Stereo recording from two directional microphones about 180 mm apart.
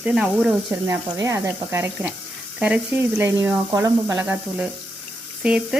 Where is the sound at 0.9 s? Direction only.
15° right (ahead or behind).